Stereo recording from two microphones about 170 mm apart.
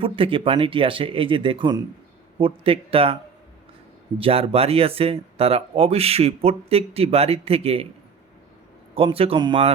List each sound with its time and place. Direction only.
0.0 s speech: 30° right (ahead or behind)
4.2 s speech: 35° right (ahead or behind)
9.0 s speech: 35° right (ahead or behind)